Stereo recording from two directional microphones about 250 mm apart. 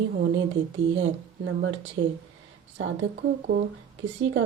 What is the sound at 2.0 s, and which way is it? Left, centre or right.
Speech, right.